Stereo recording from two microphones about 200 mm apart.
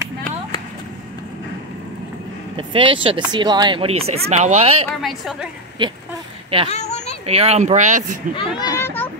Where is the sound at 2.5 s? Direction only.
25° right (ahead or behind).